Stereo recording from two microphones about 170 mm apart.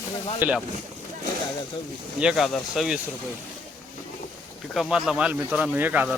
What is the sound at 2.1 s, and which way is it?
Speech, 5° right (ahead or behind).